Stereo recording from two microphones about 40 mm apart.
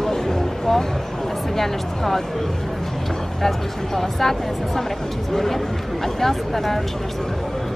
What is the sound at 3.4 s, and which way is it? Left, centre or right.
Speech, centre.